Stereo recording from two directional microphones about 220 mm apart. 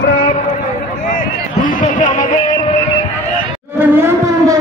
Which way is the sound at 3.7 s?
10° right (ahead or behind).